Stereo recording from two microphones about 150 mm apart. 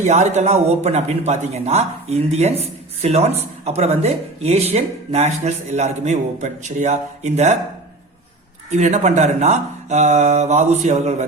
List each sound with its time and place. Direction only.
0.0 s speech: 50° right (ahead or behind)
8.7 s speech: 50° right (ahead or behind)